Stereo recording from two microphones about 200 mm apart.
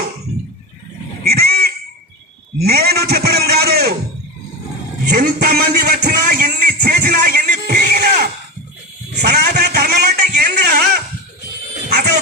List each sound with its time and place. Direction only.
1.2 s goat: 50° right (ahead or behind)
2.6 s a man's voice: 50° right (ahead or behind)
5.0 s a sound: 50° right (ahead or behind)